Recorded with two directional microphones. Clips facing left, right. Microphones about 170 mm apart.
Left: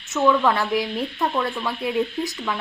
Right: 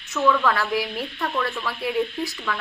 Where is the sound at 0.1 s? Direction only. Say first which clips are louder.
Left 2 dB; 20° left (ahead or behind).